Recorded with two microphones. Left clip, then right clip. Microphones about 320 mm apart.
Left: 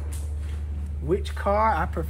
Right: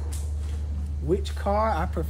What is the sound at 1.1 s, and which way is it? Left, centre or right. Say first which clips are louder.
Speech: left 2 dB; centre.